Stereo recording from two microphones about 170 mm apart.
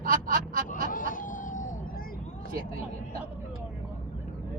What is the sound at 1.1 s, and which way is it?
Vehicle, 50° left (ahead or behind).